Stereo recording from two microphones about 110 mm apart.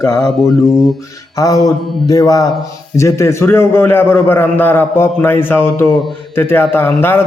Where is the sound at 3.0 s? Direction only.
25° left (ahead or behind).